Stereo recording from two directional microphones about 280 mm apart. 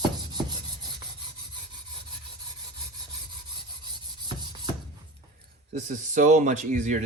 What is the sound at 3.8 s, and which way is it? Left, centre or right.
Filing, centre.